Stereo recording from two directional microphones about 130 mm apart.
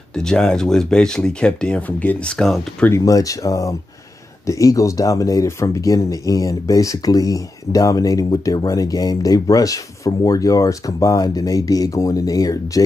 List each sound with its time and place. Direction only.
0.1 s speech: 5° left (ahead or behind)
2.9 s speech: 25° left (ahead or behind)